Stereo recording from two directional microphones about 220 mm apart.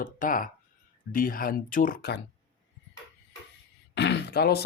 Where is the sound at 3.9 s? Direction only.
50° left (ahead or behind).